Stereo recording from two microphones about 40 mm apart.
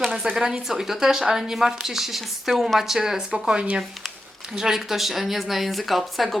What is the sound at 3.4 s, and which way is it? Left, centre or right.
Speech, right.